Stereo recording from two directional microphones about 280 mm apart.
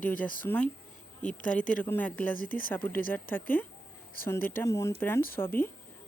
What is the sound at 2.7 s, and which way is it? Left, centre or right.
A woman's voice, centre.